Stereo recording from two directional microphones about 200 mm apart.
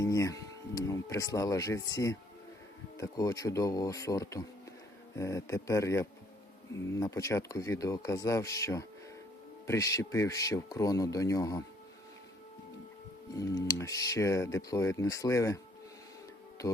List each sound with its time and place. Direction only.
0.0 s speech: 15° left (ahead or behind)
13.3 s speech: 15° left (ahead or behind)